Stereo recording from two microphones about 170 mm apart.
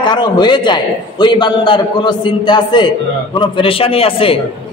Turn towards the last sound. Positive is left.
turn(degrees=35)  # may be behind; listen again after turning